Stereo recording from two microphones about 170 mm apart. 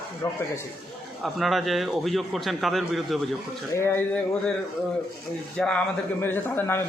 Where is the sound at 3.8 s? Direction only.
15° left (ahead or behind).